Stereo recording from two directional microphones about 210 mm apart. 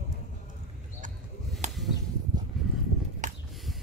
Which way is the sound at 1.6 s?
35° right (ahead or behind).